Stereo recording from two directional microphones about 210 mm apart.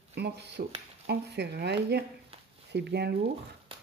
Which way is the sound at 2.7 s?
50° right (ahead or behind).